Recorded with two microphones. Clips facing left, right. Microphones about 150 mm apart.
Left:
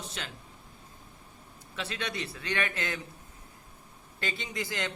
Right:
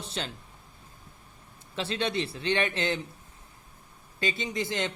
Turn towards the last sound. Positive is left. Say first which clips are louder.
# right 4 dB
turn(degrees=-20)  # may be behind; listen again after turning